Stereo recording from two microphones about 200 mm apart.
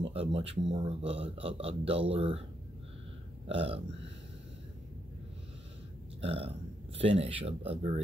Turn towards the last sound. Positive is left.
turn(degrees=-30)  # may be behind; listen again after turning